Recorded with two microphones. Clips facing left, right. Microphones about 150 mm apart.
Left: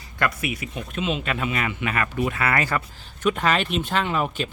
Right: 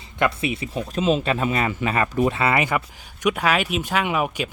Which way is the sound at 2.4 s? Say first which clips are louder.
Right 3 dB; 20° right (ahead or behind).